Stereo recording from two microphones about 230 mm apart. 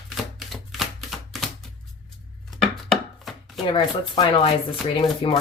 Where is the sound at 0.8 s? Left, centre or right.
Centre.